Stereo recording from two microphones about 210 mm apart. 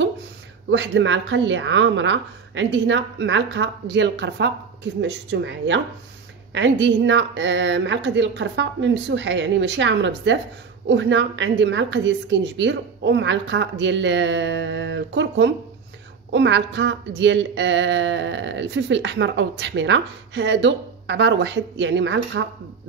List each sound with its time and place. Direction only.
0.7 s speech: 60° right (ahead or behind)